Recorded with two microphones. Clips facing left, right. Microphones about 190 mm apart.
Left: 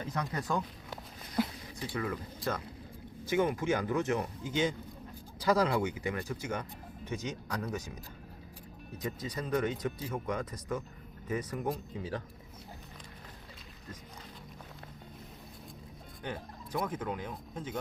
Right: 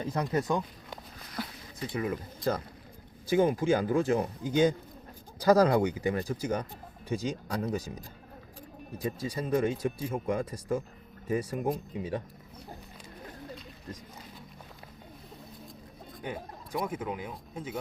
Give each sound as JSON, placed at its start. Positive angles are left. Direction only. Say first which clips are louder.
{"t": 0.0, "sound": "speech", "louder": "right 6 dB", "side_deg": -30}
{"t": 1.9, "sound": "a man's voice", "louder": "right 4 dB", "side_deg": -20}
{"t": 5.4, "sound": "a man's voice", "louder": "right 6 dB", "side_deg": -40}
{"t": 9.0, "sound": "speech", "louder": "right 4 dB", "side_deg": -30}
{"t": 16.8, "sound": "speech", "louder": "right 2 dB", "side_deg": -10}